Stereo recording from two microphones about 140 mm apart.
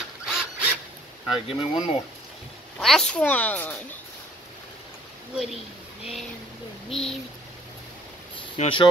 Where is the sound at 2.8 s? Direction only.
5° left (ahead or behind).